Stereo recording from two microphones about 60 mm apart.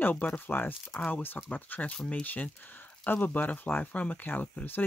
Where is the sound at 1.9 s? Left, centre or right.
Centre.